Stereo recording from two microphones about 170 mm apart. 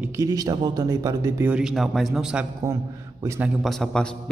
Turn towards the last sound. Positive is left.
turn(degrees=5)  # may be behind; listen again after turning